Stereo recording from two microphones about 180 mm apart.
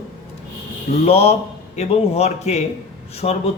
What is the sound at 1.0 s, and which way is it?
Speech, 35° left (ahead or behind).